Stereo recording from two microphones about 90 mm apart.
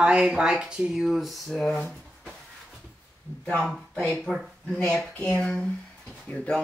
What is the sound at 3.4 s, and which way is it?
Speech, 10° left (ahead or behind).